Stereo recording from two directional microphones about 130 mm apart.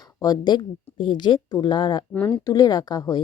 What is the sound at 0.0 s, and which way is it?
Speech, 30° left (ahead or behind).